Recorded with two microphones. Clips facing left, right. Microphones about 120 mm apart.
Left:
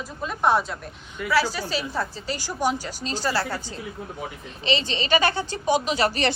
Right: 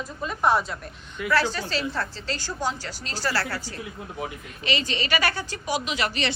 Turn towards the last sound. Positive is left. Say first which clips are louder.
# left 5 dB
turn(degrees=40)  # may be behind; listen again after turning